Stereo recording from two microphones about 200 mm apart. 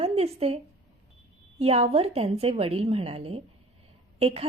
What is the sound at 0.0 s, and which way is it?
A woman's voice, 30° right (ahead or behind).